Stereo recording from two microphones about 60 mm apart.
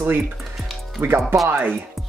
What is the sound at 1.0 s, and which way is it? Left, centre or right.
Music, right.